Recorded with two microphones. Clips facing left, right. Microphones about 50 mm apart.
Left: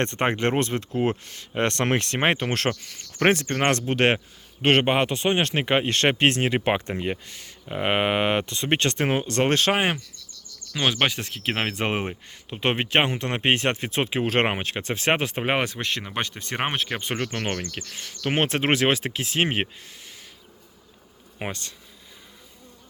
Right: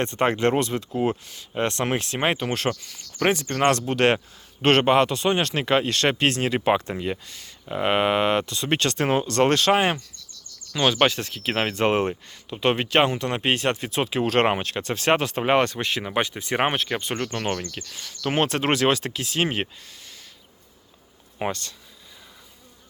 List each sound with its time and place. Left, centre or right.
0.2 s speech: left
1.2 s speech: left
4.6 s speech: centre
4.9 s speech: left
10.7 s speech: centre
12.3 s speech: left
15.6 s speech: centre
16.7 s speech: centre
17.0 s speech: left
21.3 s speech: centre